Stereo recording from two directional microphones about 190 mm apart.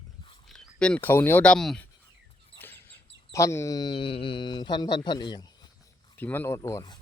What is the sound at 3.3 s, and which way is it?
Speech, 15° left (ahead or behind).